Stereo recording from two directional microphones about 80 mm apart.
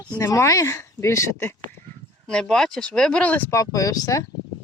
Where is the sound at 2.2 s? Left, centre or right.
Centre.